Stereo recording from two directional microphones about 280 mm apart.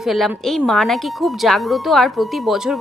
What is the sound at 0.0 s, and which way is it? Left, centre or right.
A woman's voice, centre.